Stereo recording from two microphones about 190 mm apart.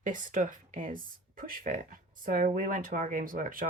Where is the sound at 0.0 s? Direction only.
45° right (ahead or behind).